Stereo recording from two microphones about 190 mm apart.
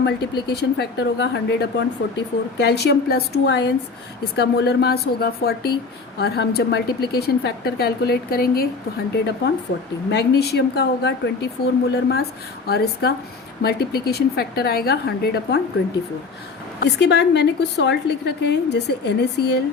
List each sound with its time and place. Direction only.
0.0 s a woman's voice: 60° left (ahead or behind)
10.1 s a woman's voice: 60° left (ahead or behind)
16.8 s a woman's voice: 65° left (ahead or behind)